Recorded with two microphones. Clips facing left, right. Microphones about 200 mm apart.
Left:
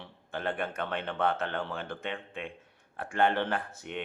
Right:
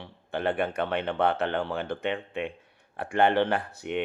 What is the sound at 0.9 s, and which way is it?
Speech, 65° right (ahead or behind).